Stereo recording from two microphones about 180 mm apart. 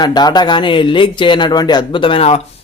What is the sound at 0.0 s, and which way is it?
Speech, 20° left (ahead or behind).